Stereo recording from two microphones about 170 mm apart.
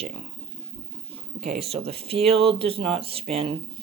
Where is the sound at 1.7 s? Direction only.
35° right (ahead or behind).